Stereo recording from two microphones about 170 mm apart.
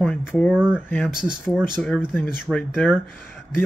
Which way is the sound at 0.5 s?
5° right (ahead or behind).